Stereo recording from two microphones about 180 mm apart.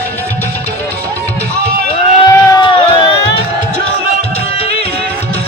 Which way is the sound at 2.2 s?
25° left (ahead or behind).